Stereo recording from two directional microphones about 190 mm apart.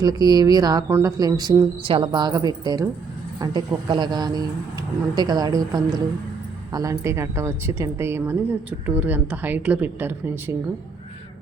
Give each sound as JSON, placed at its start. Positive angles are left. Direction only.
{"t": 0.0, "sound": "speech", "side_deg": -20}